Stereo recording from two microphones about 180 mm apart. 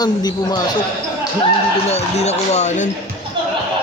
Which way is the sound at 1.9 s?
35° left (ahead or behind).